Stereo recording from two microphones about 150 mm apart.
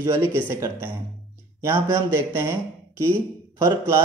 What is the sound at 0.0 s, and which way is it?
Speech, 20° right (ahead or behind).